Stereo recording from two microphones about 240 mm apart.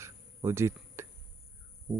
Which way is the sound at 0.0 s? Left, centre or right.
Centre.